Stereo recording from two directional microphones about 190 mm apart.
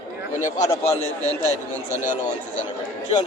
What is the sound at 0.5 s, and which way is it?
Speech, 20° left (ahead or behind).